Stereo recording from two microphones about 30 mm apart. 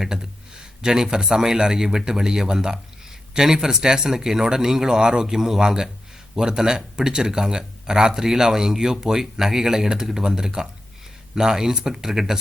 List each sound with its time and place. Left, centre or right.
0.0 s speech: centre
12.0 s speech: centre